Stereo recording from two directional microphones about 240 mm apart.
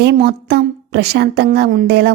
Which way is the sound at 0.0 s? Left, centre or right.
Right.